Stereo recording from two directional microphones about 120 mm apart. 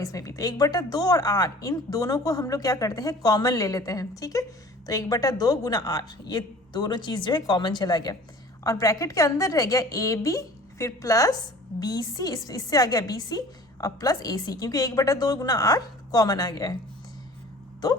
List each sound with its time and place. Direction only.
0.0 s a woman's voice: 30° left (ahead or behind)